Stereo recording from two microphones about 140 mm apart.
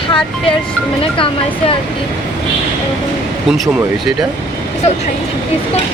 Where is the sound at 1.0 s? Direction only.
40° left (ahead or behind).